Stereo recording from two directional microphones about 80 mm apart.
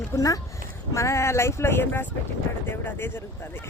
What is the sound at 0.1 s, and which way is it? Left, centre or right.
Speech, left.